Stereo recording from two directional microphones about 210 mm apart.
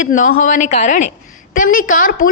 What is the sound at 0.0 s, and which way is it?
A woman's voice, 40° left (ahead or behind).